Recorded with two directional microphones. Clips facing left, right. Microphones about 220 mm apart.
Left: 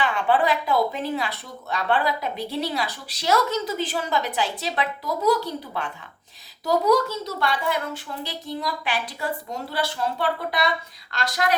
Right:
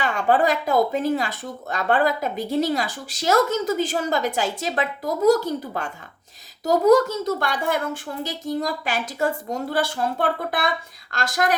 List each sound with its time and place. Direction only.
0.0 s speech: 45° right (ahead or behind)